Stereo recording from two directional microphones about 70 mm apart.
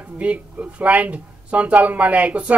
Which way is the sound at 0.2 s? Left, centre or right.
Centre.